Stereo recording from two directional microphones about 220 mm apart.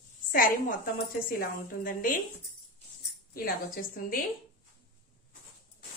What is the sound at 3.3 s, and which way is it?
Speech, 40° left (ahead or behind).